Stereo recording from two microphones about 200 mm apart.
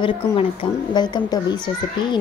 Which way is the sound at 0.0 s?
25° left (ahead or behind).